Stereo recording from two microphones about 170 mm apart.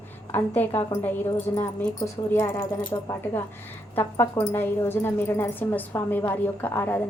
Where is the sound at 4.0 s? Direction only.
15° left (ahead or behind).